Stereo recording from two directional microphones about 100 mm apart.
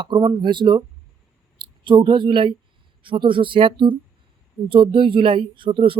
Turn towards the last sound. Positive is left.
turn(degrees=-60)  # may be behind; listen again after turning